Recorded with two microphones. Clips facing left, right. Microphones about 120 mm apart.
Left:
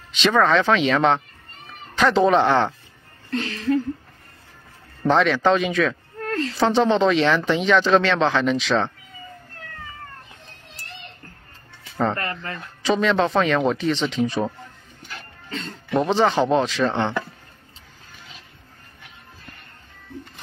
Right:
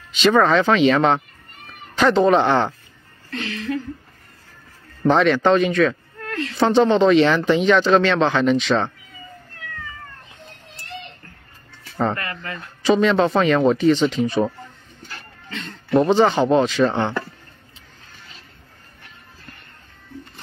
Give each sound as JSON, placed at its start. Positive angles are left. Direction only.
{"t": 0.1, "sound": "speech", "side_deg": 0}
{"t": 3.3, "sound": "a sound", "side_deg": 35}
{"t": 5.0, "sound": "speech", "side_deg": 0}
{"t": 6.2, "sound": "a sound", "side_deg": 35}
{"t": 6.5, "sound": "speech", "side_deg": 0}
{"t": 12.2, "sound": "speech", "side_deg": 35}
{"t": 12.8, "sound": "speech", "side_deg": 0}
{"t": 15.9, "sound": "speech", "side_deg": 0}